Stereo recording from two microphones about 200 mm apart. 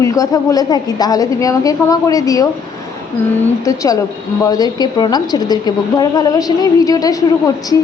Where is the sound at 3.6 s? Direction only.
15° left (ahead or behind).